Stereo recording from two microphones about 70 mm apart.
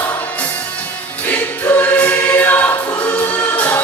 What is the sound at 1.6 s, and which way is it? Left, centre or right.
Choir, left.